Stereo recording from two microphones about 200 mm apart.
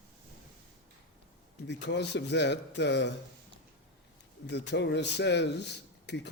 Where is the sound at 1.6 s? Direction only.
60° left (ahead or behind).